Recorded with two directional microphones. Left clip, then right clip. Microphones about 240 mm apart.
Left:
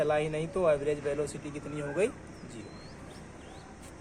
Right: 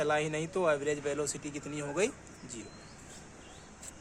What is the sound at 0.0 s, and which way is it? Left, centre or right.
Speech, right.